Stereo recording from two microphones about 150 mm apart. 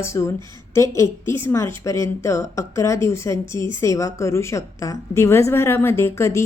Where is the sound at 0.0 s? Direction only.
20° left (ahead or behind).